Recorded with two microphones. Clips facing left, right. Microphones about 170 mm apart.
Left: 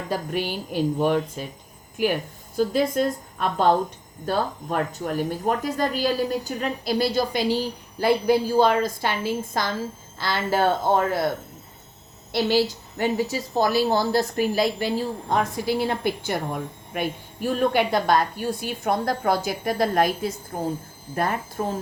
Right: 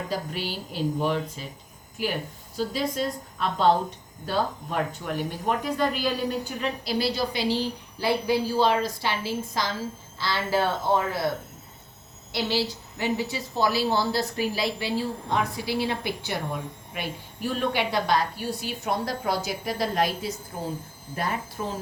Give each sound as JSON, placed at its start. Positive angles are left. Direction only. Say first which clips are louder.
{"t": 0.1, "sound": "a woman's voice", "louder": "left 4 dB", "side_deg": 50}
{"t": 2.6, "sound": "a woman's voice", "louder": "left 6 dB", "side_deg": 55}
{"t": 12.3, "sound": "a woman's voice", "louder": "left 6 dB", "side_deg": 50}